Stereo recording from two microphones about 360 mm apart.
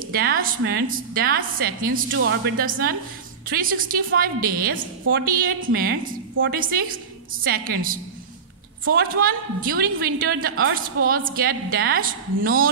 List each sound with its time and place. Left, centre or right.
0.1 s a woman's voice: right